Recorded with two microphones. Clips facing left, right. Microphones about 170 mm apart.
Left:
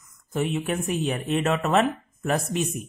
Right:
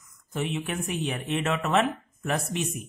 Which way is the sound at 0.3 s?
40° left (ahead or behind).